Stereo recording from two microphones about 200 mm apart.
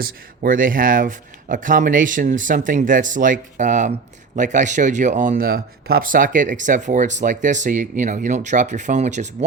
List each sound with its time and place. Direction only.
0.0 s speech: 45° right (ahead or behind)